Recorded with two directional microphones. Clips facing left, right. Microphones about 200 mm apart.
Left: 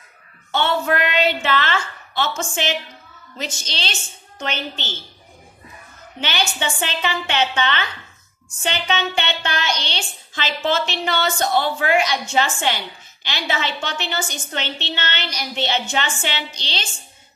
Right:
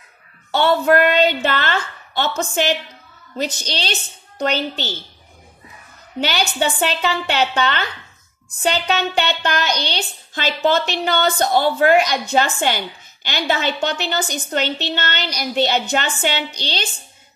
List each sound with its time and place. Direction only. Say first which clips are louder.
0.5 s a woman's voice: right 5 dB; 35° right (ahead or behind)
6.2 s a woman's voice: right 4 dB; 35° right (ahead or behind)